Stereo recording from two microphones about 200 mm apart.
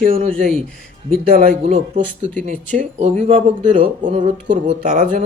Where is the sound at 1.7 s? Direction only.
30° right (ahead or behind).